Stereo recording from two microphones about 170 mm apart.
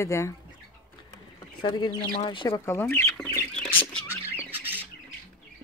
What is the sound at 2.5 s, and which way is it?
Speech, 15° left (ahead or behind).